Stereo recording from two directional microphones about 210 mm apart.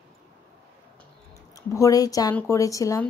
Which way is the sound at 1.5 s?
15° left (ahead or behind).